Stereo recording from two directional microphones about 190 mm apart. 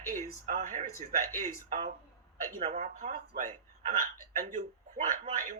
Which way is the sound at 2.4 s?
40° right (ahead or behind).